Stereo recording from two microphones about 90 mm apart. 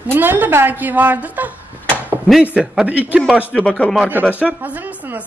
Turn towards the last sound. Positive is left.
turn(degrees=-15)  # may be behind; listen again after turning